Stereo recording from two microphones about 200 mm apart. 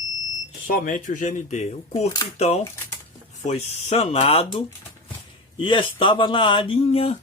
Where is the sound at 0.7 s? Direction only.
45° left (ahead or behind).